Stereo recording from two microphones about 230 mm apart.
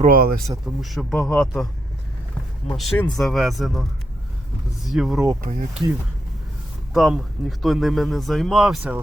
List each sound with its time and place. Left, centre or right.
0.0 s speech: right
0.8 s speech: centre
2.6 s speech: centre
4.9 s speech: centre
5.4 s speech: right
6.9 s speech: centre